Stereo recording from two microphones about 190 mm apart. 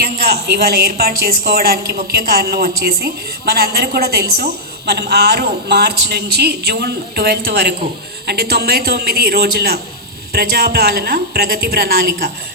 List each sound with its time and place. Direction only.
0.7 s a woman's voice: 50° right (ahead or behind)